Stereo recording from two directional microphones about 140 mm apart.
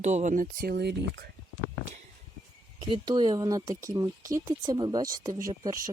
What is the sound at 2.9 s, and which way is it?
Speech, 30° right (ahead or behind).